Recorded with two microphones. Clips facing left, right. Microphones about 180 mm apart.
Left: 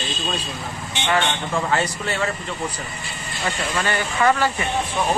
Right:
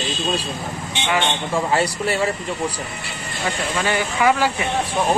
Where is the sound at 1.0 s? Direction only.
10° right (ahead or behind).